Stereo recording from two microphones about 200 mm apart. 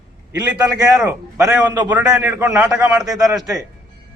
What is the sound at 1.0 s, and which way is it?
A man's voice, 5° right (ahead or behind).